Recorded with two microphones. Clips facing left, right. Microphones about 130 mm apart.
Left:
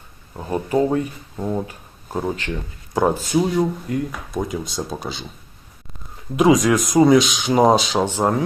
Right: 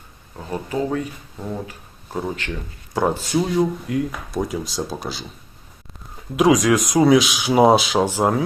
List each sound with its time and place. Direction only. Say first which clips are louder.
0.3 s speech: left 5 dB; 25° left (ahead or behind)
1.4 s speech: left 5 dB; 15° left (ahead or behind)
3.0 s speech: left 2 dB; centre (ahead or behind)
6.3 s speech: left 1 dB; centre (ahead or behind)